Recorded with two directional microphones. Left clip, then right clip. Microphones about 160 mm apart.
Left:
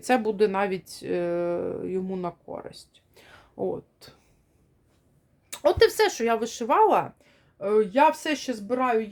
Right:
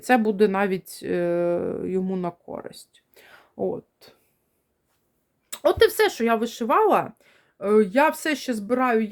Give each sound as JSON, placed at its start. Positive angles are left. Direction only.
{"t": 0.0, "sound": "speech", "side_deg": -25}
{"t": 3.5, "sound": "speech", "side_deg": -15}
{"t": 4.0, "sound": "speech", "side_deg": -5}
{"t": 5.5, "sound": "speech", "side_deg": -30}